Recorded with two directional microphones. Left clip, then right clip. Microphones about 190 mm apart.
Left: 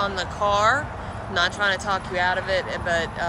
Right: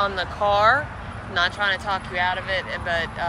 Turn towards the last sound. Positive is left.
turn(degrees=20)  # may be behind; listen again after turning